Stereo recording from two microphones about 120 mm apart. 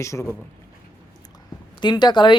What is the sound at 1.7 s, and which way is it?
Speech, 40° left (ahead or behind).